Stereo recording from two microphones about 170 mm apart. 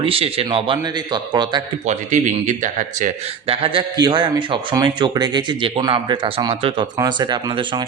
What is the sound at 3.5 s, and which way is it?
A man's voice, 30° right (ahead or behind).